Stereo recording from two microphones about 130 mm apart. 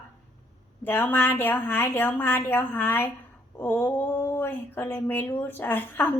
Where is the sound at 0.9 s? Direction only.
15° left (ahead or behind).